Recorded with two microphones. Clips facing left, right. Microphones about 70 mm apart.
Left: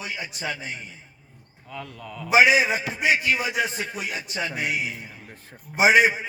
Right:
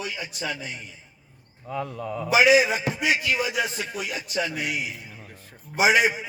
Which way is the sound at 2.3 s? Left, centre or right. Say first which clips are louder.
Even; left.